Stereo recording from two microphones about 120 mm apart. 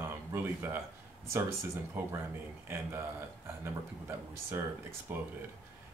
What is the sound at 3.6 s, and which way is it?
Speech, 20° right (ahead or behind).